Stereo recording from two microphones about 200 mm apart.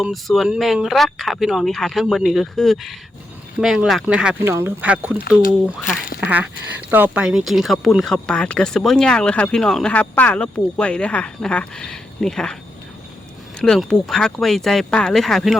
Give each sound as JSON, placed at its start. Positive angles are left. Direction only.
{"t": 0.0, "sound": "speech", "side_deg": 0}
{"t": 6.1, "sound": "duck", "side_deg": -5}
{"t": 6.9, "sound": "speech", "side_deg": -10}
{"t": 13.6, "sound": "speech", "side_deg": 5}